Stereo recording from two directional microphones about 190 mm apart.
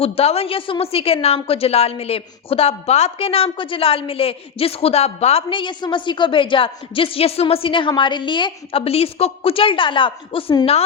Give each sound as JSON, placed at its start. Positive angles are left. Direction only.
{"t": 0.0, "sound": "a woman's voice", "side_deg": 30}